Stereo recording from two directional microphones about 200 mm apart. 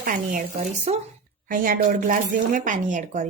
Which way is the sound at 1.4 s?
45° right (ahead or behind).